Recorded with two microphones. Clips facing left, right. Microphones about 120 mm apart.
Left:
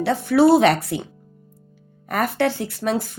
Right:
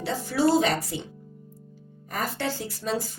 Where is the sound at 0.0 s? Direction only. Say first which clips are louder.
Left 8 dB; 60° left (ahead or behind).